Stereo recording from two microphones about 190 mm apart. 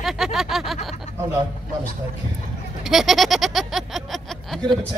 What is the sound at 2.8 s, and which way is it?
Speech, centre (ahead or behind).